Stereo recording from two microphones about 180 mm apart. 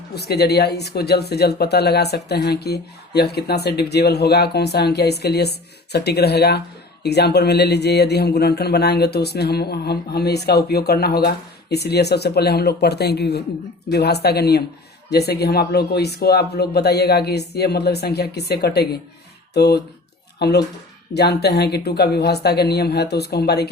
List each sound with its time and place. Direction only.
0.1 s speech: 65° left (ahead or behind)